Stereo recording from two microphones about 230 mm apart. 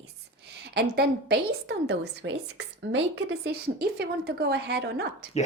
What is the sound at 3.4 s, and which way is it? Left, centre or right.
A woman's voice, right.